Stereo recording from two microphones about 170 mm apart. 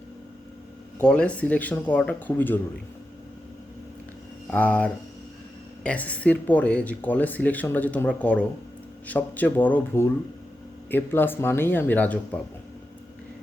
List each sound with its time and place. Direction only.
0.9 s speech: 5° left (ahead or behind)
4.5 s speech: 10° left (ahead or behind)